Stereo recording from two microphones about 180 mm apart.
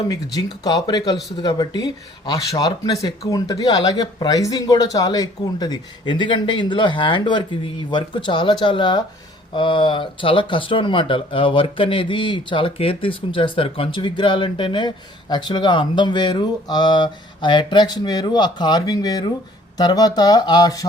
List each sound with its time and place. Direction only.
0.0 s speech: 20° left (ahead or behind)